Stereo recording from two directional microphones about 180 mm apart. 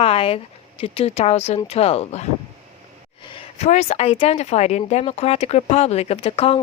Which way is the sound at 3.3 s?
40° left (ahead or behind).